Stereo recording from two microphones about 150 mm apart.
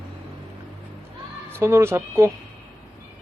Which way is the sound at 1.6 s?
15° right (ahead or behind).